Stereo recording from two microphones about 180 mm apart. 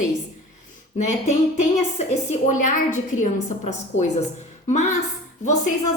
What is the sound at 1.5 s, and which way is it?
A woman's voice, 40° left (ahead or behind).